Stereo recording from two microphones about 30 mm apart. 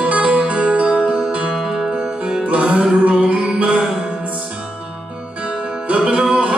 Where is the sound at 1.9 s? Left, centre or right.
Right.